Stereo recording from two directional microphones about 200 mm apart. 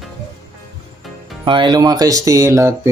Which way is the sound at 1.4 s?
25° right (ahead or behind).